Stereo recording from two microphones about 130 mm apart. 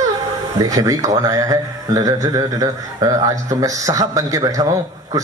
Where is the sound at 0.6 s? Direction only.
25° right (ahead or behind).